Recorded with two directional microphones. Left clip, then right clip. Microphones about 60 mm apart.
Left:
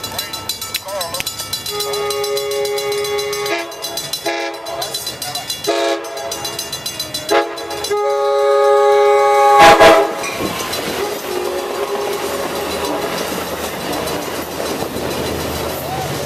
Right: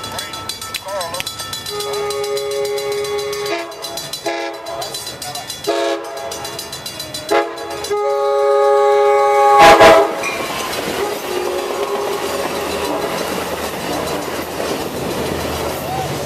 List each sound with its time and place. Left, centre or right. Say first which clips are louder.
1.8 s music: left 1 dB; centre
5.7 s train: left 1 dB; centre
7.3 s train: even; centre
11.1 s train: even; right
11.5 s train: right 1 dB; right
12.0 s a sound: even; centre
12.3 s a sound: even; right
12.8 s vehicle: even; centre
13.8 s train: even; centre